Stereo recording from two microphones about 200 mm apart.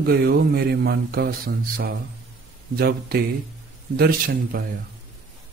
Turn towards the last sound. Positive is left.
turn(degrees=-50)  # may be behind; listen again after turning